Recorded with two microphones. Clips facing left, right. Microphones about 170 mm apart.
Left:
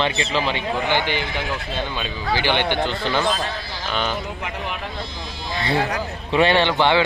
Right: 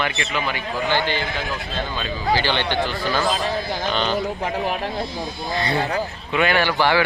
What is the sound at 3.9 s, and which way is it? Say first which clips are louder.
Speech: right 1 dB; 5° left (ahead or behind).